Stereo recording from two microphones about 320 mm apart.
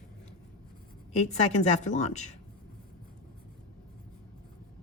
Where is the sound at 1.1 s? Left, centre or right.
Left.